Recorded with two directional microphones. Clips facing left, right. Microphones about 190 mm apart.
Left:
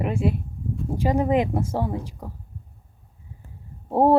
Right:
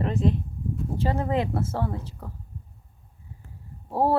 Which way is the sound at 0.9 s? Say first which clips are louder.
Left 5 dB; 15° left (ahead or behind).